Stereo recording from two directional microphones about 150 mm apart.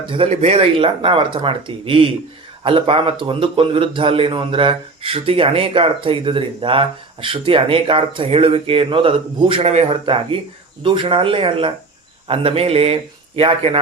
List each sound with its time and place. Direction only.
0.3 s a man's voice: 45° right (ahead or behind)